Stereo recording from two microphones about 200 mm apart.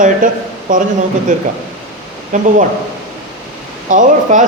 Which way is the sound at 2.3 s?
40° right (ahead or behind).